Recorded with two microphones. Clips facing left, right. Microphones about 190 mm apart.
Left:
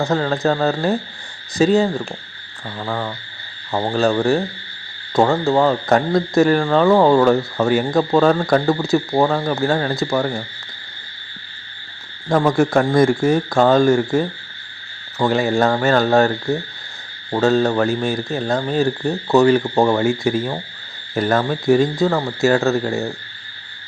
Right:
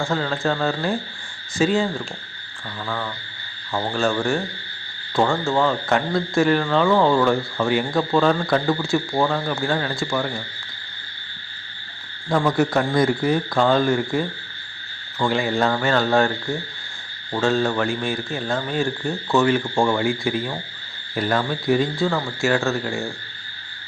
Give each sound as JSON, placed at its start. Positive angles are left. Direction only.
{"t": 0.0, "sound": "speech", "side_deg": 40}
{"t": 12.3, "sound": "speech", "side_deg": 45}